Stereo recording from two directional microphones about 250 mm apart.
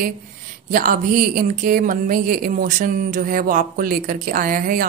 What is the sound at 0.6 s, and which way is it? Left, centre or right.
Speech, right.